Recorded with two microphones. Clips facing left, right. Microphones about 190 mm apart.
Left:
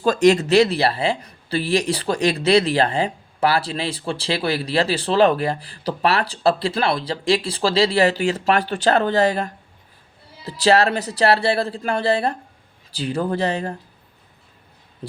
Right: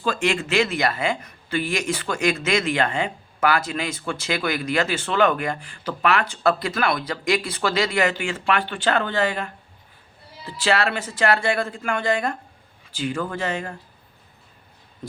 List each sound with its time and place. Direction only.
0.0 s speech: 40° left (ahead or behind)